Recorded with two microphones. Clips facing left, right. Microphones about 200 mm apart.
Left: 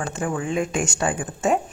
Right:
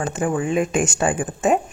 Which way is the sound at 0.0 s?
20° right (ahead or behind).